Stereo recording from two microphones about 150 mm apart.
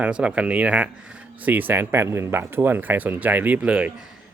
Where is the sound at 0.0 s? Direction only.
10° right (ahead or behind).